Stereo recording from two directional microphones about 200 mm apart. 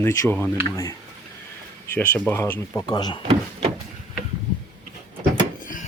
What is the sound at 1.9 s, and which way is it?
Speech, 10° left (ahead or behind).